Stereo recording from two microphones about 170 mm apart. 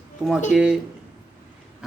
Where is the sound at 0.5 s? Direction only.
5° right (ahead or behind).